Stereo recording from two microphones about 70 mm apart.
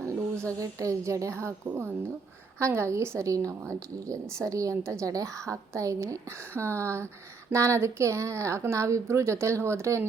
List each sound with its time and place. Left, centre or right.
0.6 s a woman's voice: right